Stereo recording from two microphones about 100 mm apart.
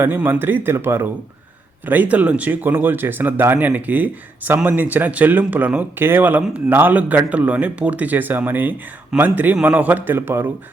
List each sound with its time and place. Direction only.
0.0 s speech: 20° right (ahead or behind)